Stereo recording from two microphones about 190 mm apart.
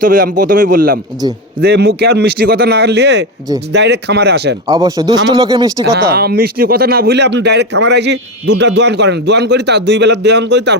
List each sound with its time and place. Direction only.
0.0 s a man's voice: 45° right (ahead or behind)
1.6 s speech: 60° right (ahead or behind)
4.7 s speech: 20° right (ahead or behind)
6.1 s speech: 55° right (ahead or behind)